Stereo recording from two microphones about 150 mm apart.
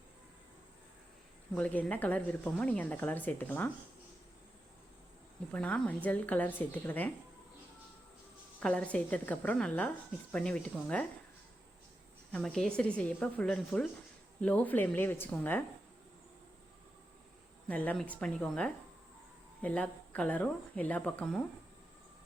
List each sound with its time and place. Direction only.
1.5 s speech: 10° left (ahead or behind)
5.5 s speech: 10° left (ahead or behind)
8.6 s speech: 10° left (ahead or behind)
12.3 s speech: 5° left (ahead or behind)
17.7 s speech: 10° left (ahead or behind)